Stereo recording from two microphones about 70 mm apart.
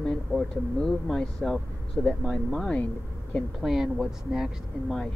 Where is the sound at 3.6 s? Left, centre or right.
Centre.